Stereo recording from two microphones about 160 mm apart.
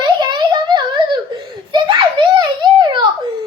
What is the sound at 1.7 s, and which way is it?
Giggle, 30° right (ahead or behind).